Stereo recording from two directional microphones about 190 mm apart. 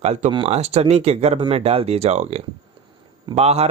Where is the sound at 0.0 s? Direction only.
35° right (ahead or behind).